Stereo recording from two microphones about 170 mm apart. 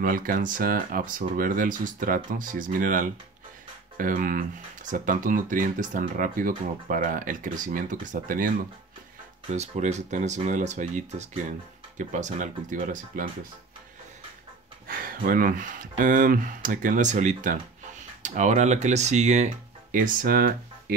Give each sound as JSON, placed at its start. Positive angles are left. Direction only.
{"t": 0.0, "sound": "speech", "side_deg": -55}
{"t": 9.5, "sound": "speech", "side_deg": -40}
{"t": 14.9, "sound": "speech", "side_deg": -55}